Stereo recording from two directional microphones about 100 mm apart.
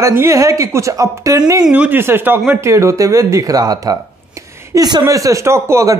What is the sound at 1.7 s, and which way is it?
Speech, 15° right (ahead or behind).